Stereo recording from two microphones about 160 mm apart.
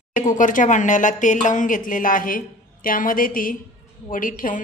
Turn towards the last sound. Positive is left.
turn(degrees=55)  # may be behind; listen again after turning